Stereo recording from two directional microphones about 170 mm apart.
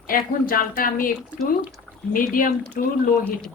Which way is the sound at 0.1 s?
55° left (ahead or behind).